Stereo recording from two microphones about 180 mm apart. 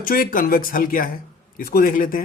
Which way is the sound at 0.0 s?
50° left (ahead or behind).